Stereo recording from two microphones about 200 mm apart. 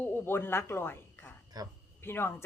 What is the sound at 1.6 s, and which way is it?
Speech, 20° right (ahead or behind).